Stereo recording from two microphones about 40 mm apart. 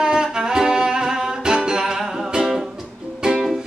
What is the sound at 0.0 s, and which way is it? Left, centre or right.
Music, centre.